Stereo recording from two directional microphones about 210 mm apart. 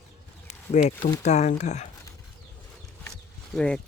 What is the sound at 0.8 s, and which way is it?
Speech, 35° left (ahead or behind).